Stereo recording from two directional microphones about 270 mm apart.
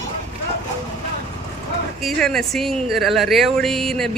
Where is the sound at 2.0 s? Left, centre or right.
Centre.